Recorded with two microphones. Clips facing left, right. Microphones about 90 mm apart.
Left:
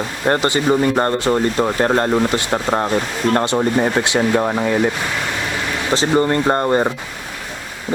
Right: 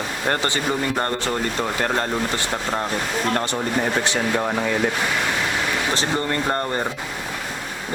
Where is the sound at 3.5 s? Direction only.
20° left (ahead or behind).